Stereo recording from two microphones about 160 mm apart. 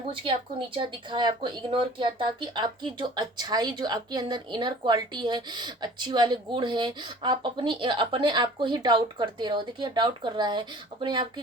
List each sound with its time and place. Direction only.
0.1 s speech: 30° right (ahead or behind)